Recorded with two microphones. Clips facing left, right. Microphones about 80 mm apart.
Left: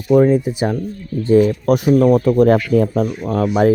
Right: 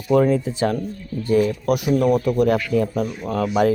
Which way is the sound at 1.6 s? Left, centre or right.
Left.